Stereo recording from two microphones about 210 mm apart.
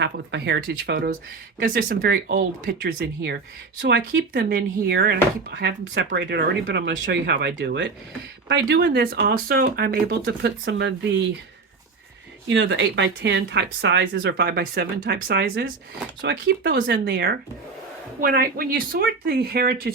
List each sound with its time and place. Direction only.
0.0 s speech: 55° right (ahead or behind)
3.8 s speech: 60° right (ahead or behind)
12.5 s speech: 60° right (ahead or behind)